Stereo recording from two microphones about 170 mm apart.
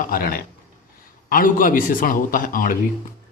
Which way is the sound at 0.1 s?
60° left (ahead or behind).